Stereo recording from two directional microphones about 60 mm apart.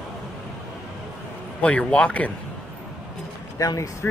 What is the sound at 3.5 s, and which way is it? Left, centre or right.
Speech, left.